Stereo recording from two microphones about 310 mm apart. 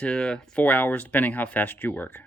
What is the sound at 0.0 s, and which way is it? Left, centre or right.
Speech, centre.